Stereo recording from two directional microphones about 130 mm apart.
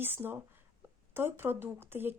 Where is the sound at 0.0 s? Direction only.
15° right (ahead or behind).